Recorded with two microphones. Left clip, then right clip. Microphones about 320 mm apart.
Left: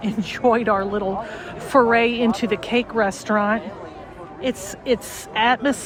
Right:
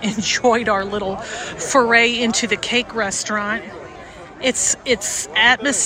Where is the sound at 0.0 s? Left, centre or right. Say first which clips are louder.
Right 3 dB; centre.